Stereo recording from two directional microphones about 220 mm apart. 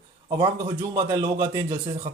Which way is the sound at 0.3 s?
20° right (ahead or behind).